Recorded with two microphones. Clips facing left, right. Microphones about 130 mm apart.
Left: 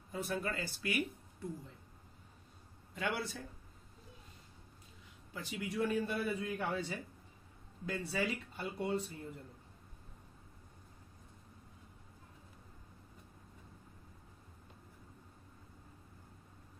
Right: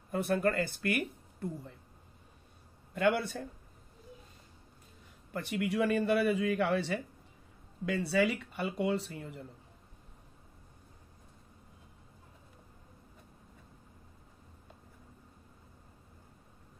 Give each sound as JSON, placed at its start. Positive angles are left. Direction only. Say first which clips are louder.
{"t": 0.1, "sound": "speech", "louder": "right 9 dB", "side_deg": -60}
{"t": 2.9, "sound": "a man's voice", "louder": "right 9 dB", "side_deg": -55}
{"t": 5.3, "sound": "speech", "louder": "right 8 dB", "side_deg": -60}